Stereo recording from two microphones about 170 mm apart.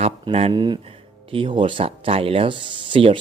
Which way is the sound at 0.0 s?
35° right (ahead or behind).